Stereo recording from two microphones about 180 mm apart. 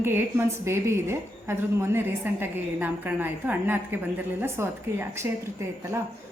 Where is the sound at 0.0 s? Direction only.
10° right (ahead or behind).